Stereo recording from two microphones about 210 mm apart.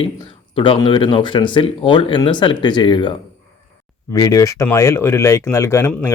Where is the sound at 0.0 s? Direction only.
25° left (ahead or behind).